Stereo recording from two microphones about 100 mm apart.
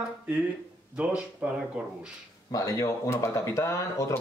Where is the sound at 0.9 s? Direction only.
15° right (ahead or behind).